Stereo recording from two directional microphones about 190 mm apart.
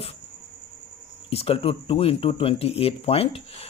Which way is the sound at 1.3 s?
30° left (ahead or behind).